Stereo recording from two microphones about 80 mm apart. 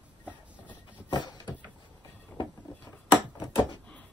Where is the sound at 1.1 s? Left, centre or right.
Left.